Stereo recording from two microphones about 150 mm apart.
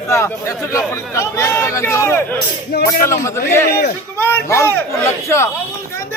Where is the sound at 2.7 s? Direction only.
90° left.